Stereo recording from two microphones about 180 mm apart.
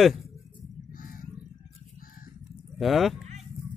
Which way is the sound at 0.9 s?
50° left (ahead or behind).